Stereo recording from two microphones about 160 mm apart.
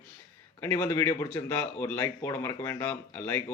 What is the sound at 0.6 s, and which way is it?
Speech, 15° left (ahead or behind).